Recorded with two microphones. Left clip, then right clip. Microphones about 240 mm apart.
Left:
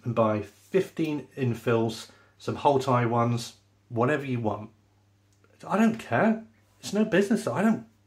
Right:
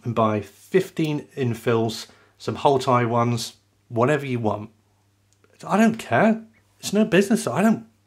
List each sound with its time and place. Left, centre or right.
0.0 s speech: right
5.6 s speech: right